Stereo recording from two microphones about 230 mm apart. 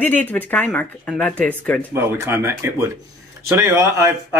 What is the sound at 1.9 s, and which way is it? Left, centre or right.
A man's voice, centre.